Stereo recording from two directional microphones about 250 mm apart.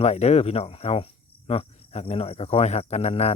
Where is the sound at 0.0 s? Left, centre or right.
Left.